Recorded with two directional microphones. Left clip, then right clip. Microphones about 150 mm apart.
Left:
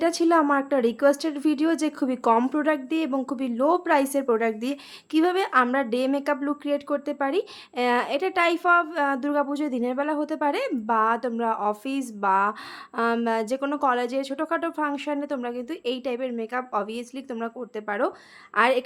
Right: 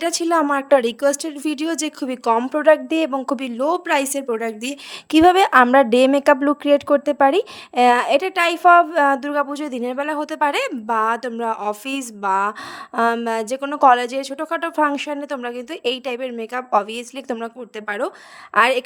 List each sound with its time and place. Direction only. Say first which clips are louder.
0.0 s speech: right 2 dB; 50° right (ahead or behind)
4.2 s a woman's voice: even; 5° left (ahead or behind)
4.6 s speech: right 3 dB; 55° right (ahead or behind)